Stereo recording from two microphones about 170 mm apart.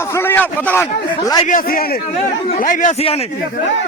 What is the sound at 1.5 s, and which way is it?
A man's voice, 55° left (ahead or behind).